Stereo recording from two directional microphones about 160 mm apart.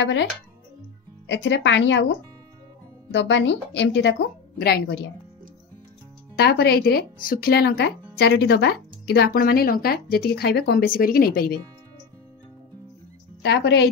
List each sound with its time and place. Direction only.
0.0 s a woman's voice: 90° left
3.1 s a woman's voice: 90° left
6.3 s speech: 85° left
11.0 s speech: 65° left (ahead or behind)
13.4 s a woman's voice: 90° left